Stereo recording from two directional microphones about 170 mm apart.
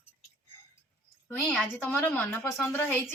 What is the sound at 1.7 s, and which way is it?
Speech, 10° left (ahead or behind).